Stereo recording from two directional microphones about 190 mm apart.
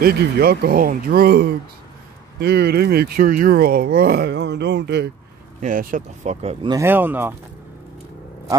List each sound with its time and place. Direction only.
0.0 s speech: 55° right (ahead or behind)
5.6 s speech: 45° right (ahead or behind)
6.7 s speech: 10° right (ahead or behind)